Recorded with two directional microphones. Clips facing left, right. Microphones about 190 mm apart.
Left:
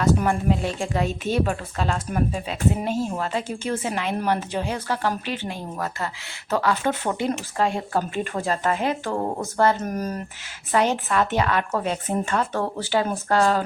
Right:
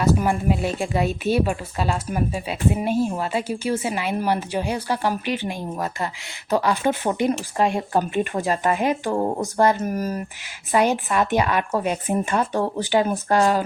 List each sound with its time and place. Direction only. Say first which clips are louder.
0.0 s a woman's voice: right 1 dB; 10° right (ahead or behind)